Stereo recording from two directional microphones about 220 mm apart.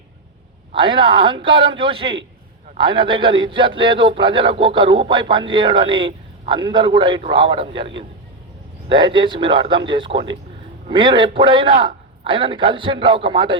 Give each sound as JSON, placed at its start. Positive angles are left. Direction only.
{"t": 0.7, "sound": "a man's voice", "side_deg": -20}